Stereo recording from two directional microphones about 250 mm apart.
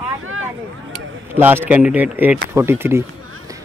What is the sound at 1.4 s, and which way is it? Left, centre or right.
Speech, centre.